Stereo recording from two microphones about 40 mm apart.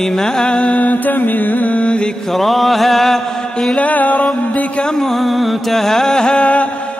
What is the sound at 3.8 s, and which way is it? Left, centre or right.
Music, left.